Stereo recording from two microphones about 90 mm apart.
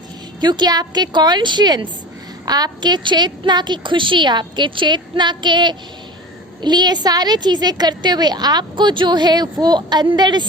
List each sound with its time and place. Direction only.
0.3 s a woman's voice: 55° right (ahead or behind)